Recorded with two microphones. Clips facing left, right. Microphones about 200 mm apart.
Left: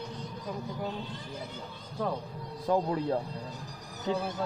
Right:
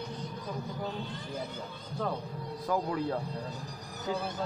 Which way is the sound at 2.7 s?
30° left (ahead or behind).